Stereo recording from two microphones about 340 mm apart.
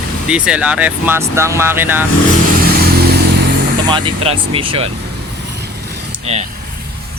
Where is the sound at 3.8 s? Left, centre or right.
Centre.